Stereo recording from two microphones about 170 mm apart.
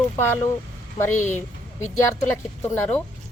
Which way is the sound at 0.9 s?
15° left (ahead or behind).